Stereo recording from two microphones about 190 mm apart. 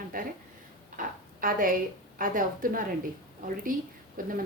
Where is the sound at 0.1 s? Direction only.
45° right (ahead or behind).